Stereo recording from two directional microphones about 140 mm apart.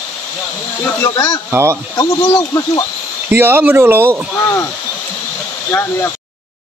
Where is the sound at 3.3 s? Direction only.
15° right (ahead or behind).